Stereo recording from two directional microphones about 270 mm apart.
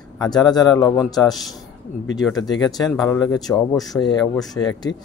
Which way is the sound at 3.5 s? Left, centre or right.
Centre.